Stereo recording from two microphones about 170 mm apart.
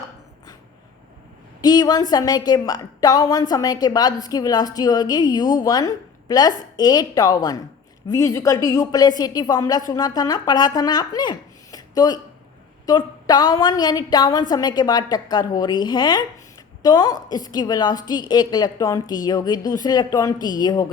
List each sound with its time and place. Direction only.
1.6 s a woman's voice: 25° left (ahead or behind)